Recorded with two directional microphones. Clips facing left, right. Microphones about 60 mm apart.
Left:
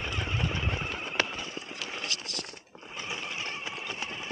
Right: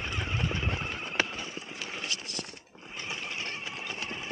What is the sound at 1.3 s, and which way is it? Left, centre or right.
Run, centre.